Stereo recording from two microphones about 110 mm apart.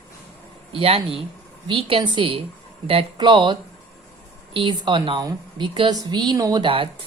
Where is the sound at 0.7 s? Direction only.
60° right (ahead or behind).